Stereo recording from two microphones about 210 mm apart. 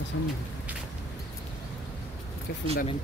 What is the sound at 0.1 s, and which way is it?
Speech, 65° left (ahead or behind).